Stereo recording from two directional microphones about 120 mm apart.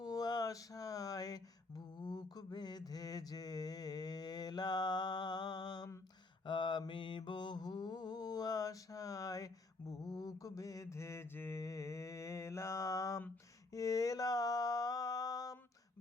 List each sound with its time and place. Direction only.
0.0 s mantra: 35° left (ahead or behind)